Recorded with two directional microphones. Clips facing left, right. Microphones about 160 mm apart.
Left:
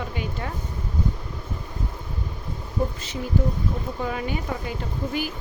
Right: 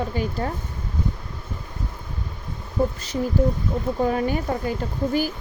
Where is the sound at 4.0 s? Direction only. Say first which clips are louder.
Right 9 dB; 40° right (ahead or behind).